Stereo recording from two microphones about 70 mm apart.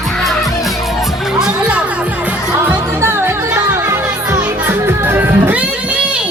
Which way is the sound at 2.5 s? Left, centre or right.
Right.